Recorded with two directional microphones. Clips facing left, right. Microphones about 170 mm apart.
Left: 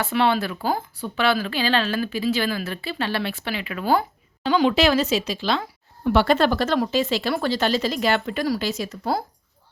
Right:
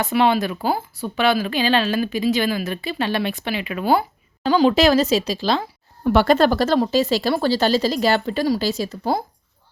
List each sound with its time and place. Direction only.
0.1 s speech: 15° right (ahead or behind)
4.4 s speech: 35° right (ahead or behind)